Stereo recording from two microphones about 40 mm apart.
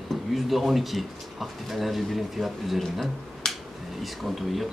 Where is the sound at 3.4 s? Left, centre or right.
Centre.